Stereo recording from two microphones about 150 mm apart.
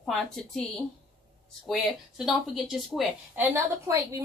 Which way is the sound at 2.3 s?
Centre (ahead or behind).